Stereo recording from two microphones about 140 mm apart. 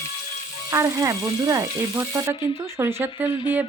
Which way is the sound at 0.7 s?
20° right (ahead or behind).